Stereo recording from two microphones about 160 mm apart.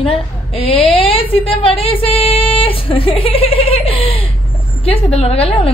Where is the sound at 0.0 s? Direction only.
35° left (ahead or behind).